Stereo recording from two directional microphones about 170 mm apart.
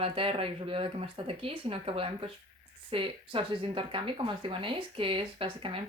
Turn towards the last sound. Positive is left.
turn(degrees=-30)  # may be behind; listen again after turning